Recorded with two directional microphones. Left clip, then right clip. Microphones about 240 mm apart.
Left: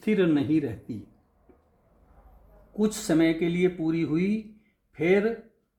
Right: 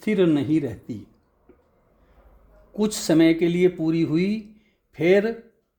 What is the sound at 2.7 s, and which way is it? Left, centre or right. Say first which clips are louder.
Speech: right 4 dB; right.